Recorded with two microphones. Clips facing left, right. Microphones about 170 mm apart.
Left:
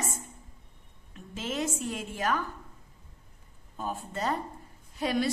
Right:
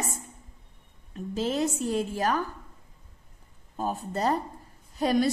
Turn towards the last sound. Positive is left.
turn(degrees=-40)  # may be behind; listen again after turning